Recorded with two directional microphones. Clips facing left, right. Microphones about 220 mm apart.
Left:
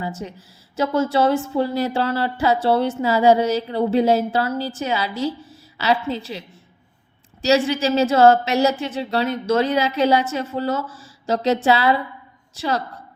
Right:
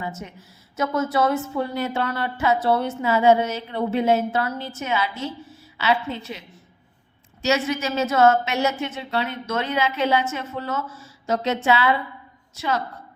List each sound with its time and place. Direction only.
0.0 s speech: 35° left (ahead or behind)